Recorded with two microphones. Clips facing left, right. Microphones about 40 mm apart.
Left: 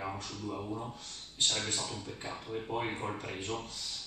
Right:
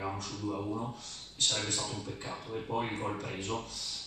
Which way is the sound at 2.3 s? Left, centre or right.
Centre.